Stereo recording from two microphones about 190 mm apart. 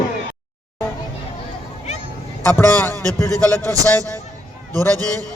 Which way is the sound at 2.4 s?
10° left (ahead or behind).